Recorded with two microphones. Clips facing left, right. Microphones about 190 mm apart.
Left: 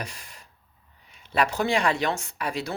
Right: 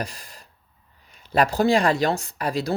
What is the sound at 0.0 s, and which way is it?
Gasp, 35° right (ahead or behind).